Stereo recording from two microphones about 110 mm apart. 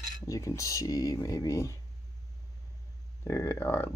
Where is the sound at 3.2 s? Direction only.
25° left (ahead or behind).